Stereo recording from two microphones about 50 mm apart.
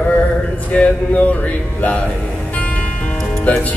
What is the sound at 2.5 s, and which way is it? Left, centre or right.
Music, left.